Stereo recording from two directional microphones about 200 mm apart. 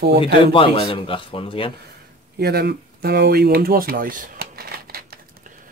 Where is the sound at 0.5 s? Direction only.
25° left (ahead or behind).